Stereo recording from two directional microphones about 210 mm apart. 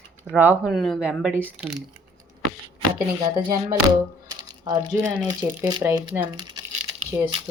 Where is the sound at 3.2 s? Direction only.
20° right (ahead or behind).